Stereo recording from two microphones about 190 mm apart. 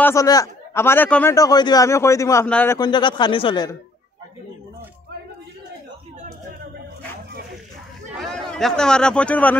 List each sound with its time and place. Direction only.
0.0 s a man's voice: 15° left (ahead or behind)
2.8 s speech: 25° left (ahead or behind)
8.1 s speech: centre (ahead or behind)